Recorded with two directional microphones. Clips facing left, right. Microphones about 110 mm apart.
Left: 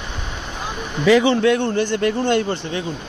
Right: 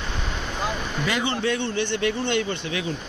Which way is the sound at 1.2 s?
90° left.